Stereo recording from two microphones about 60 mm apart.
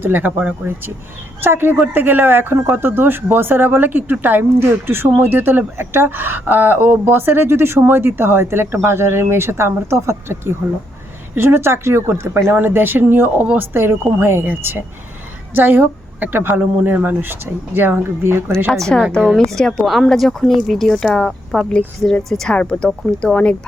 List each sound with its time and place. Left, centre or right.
0.0 s speech: right
12.5 s speech: right
18.7 s speech: centre